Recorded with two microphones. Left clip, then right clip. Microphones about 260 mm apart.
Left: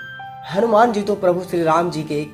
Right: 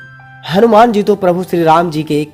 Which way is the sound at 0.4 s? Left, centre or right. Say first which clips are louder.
Right 7 dB; right.